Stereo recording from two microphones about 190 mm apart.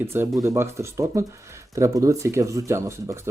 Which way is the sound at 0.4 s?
15° right (ahead or behind).